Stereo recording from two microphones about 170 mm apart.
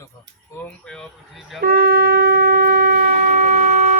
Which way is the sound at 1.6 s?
60° right (ahead or behind).